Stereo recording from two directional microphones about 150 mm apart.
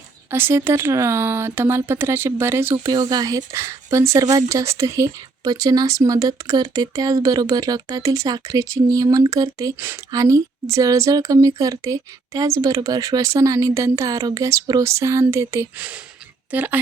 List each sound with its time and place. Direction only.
0.3 s speech: 15° right (ahead or behind)
2.7 s speech: 25° right (ahead or behind)